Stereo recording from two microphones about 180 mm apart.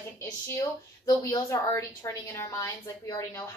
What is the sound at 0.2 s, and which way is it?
A woman's voice, 15° left (ahead or behind).